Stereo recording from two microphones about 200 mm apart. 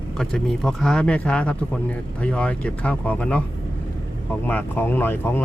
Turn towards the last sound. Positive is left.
turn(degrees=10)  # may be behind; listen again after turning